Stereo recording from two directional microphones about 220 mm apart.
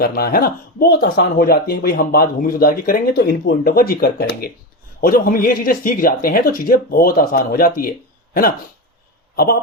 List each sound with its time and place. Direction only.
0.0 s speech: 45° left (ahead or behind)